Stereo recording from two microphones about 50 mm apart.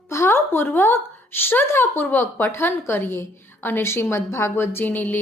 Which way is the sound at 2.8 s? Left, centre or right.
Left.